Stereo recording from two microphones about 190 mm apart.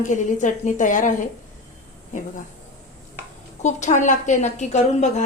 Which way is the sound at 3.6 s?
40° left (ahead or behind).